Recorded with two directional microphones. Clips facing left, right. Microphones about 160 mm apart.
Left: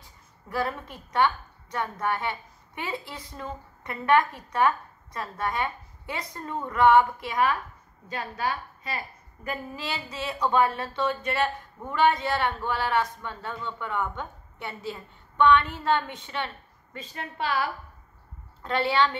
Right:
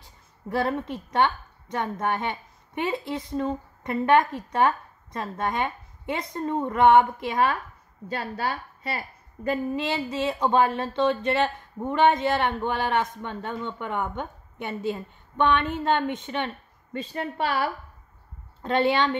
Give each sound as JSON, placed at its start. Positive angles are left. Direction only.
{"t": 0.5, "sound": "a woman's voice", "side_deg": -25}
{"t": 18.6, "sound": "speech", "side_deg": -20}